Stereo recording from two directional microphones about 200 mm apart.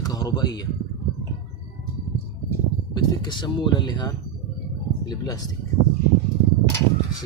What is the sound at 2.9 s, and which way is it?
Speech, 20° left (ahead or behind).